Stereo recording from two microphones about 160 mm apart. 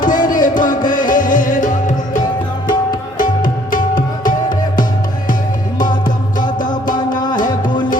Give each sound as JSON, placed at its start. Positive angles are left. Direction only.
{"t": 0.0, "sound": "music", "side_deg": 55}
{"t": 3.2, "sound": "music", "side_deg": 55}
{"t": 5.8, "sound": "music", "side_deg": 55}